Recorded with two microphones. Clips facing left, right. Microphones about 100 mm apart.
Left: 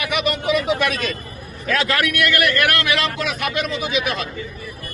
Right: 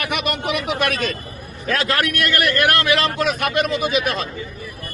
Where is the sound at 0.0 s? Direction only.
55° right (ahead or behind).